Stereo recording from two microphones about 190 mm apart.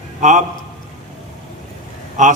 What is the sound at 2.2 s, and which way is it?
Speech, 40° right (ahead or behind).